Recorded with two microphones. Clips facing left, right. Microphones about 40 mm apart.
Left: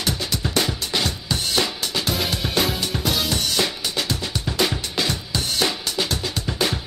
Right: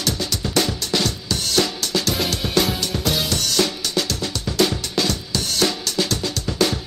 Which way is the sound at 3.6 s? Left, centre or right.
Centre.